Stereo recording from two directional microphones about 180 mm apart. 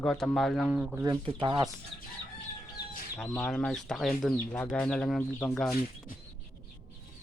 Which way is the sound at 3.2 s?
15° left (ahead or behind).